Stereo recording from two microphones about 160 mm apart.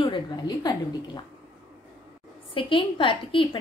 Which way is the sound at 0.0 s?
30° left (ahead or behind).